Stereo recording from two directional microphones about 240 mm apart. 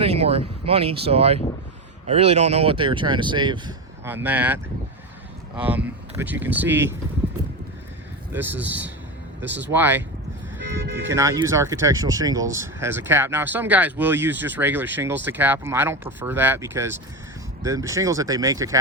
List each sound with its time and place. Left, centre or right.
0.0 s speech: right; by 6.9 s centre
8.3 s speech: centre
11.1 s speech: centre